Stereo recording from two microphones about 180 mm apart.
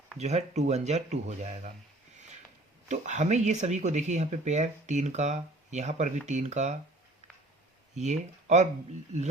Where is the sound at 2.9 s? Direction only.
40° right (ahead or behind).